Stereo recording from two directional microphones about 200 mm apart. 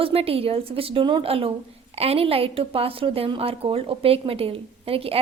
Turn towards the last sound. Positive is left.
turn(degrees=-30)  # may be behind; listen again after turning